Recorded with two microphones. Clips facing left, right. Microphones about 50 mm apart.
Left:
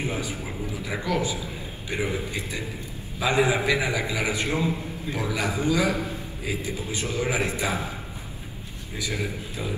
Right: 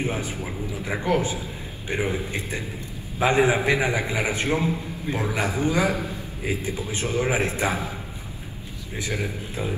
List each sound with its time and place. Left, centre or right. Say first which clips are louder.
0.0 s a man's voice: right 2 dB; right
2.0 s a man's voice: right 1 dB; right
8.9 s a man's voice: right 1 dB; right